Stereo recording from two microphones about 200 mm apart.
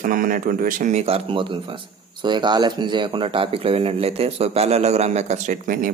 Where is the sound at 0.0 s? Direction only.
45° right (ahead or behind).